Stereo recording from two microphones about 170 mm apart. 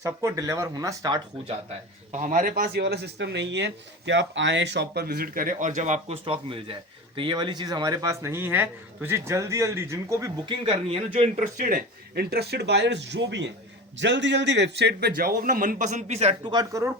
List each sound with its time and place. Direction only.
0.0 s speech: 20° right (ahead or behind)
2.1 s speech: 50° right (ahead or behind); by 10.5 s 20° right (ahead or behind)
10.7 s speech: 35° right (ahead or behind)
16.5 s speech: 20° right (ahead or behind)